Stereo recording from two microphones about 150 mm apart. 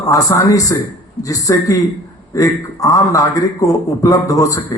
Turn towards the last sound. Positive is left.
turn(degrees=20)  # may be behind; listen again after turning